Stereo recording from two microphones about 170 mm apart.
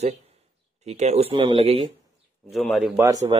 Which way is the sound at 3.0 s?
20° right (ahead or behind).